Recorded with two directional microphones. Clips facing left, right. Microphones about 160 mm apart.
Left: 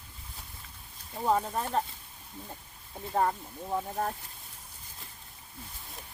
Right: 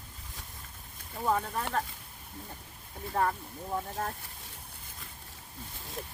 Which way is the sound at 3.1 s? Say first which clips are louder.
Left 2 dB; 15° left (ahead or behind).